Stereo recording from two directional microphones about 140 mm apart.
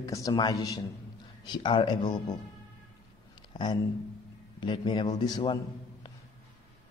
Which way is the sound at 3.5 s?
35° left (ahead or behind).